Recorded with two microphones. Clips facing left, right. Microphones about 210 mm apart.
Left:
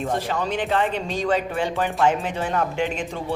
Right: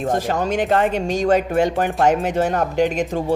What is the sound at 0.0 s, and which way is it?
Speech, 45° right (ahead or behind).